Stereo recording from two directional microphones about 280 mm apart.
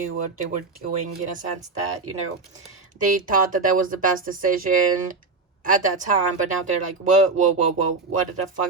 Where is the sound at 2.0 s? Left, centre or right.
Right.